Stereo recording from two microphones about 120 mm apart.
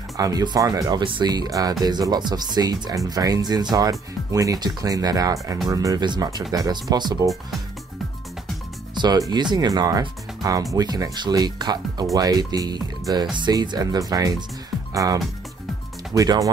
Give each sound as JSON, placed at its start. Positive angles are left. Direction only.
{"t": 0.2, "sound": "speech", "side_deg": -35}
{"t": 8.9, "sound": "music", "side_deg": -35}
{"t": 9.3, "sound": "speech", "side_deg": -35}
{"t": 16.1, "sound": "speech", "side_deg": -30}